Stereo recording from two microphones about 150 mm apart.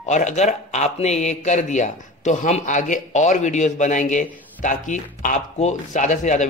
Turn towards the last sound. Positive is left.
turn(degrees=55)  # may be behind; listen again after turning